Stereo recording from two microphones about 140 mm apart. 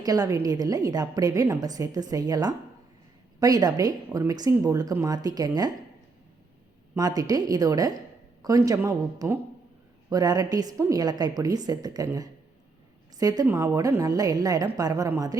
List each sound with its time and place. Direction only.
0.0 s a woman's voice: 25° right (ahead or behind)
6.9 s a woman's voice: 25° right (ahead or behind)